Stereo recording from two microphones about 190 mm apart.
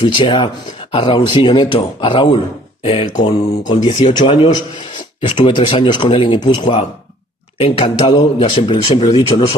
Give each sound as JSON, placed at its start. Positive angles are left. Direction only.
{"t": 0.0, "sound": "speech", "side_deg": 25}